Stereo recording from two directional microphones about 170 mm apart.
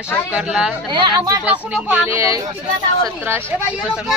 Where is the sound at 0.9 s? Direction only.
25° right (ahead or behind).